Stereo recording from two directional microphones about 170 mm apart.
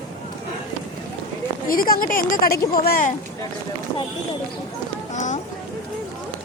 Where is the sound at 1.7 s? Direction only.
55° left (ahead or behind).